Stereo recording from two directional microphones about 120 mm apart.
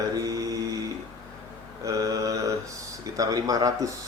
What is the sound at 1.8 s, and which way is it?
Speech, 30° right (ahead or behind).